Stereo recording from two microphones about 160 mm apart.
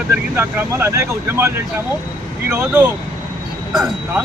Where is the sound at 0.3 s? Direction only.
15° right (ahead or behind).